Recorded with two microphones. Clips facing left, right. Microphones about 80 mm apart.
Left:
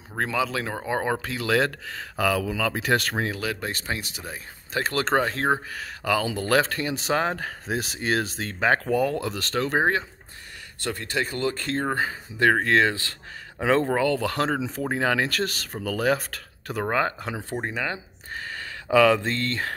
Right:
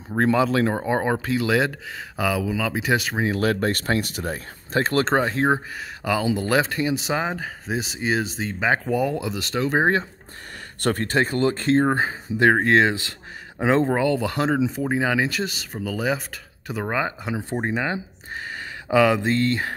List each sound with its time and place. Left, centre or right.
0.2 s speech: right; by 3.3 s centre
3.3 s speech: right
4.7 s speech: right; by 9.8 s centre
10.8 s speech: right; by 17.5 s centre
17.5 s speech: right